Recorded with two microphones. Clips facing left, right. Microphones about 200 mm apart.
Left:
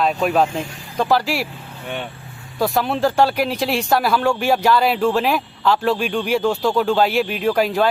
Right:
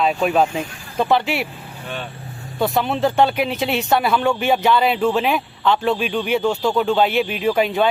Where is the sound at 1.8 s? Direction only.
15° left (ahead or behind).